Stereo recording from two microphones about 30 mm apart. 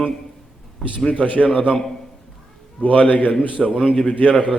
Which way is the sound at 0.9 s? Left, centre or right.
Left.